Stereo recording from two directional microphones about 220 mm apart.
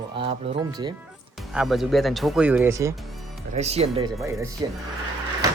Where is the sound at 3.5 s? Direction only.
30° right (ahead or behind).